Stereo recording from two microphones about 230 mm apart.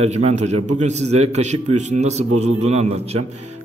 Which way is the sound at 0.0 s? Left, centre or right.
Right.